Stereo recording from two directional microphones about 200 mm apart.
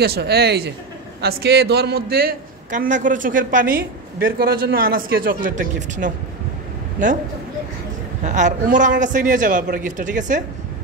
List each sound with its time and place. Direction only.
0.0 s a man's voice: 55° right (ahead or behind)
8.2 s a man's voice: 35° right (ahead or behind)